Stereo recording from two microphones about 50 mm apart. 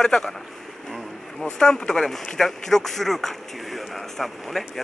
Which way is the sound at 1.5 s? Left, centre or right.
Centre.